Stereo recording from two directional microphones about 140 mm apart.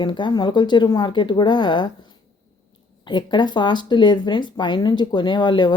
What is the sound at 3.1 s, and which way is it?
Speech, 35° left (ahead or behind).